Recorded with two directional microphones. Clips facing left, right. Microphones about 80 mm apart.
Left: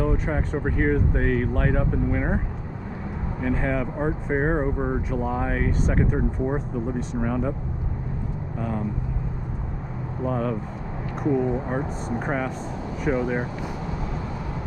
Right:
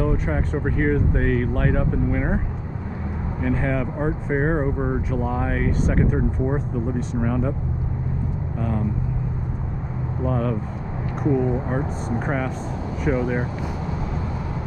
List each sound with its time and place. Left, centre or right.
0.0 s speech: centre
3.4 s speech: centre
7.2 s speech: centre
8.5 s speech: centre
10.2 s speech: centre
11.4 s speech: right
12.2 s speech: centre